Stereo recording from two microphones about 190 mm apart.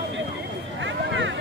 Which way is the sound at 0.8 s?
75° right (ahead or behind).